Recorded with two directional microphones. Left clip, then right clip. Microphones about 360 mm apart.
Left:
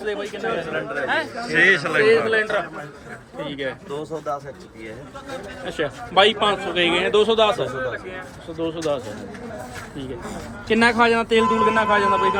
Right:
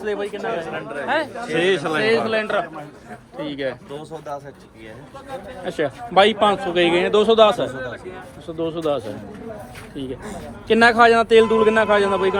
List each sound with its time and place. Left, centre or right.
0.0 s a man's voice: right
5.6 s a man's voice: right
10.0 s a man's voice: right